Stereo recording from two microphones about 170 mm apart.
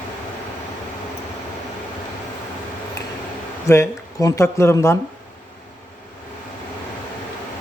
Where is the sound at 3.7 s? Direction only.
15° left (ahead or behind).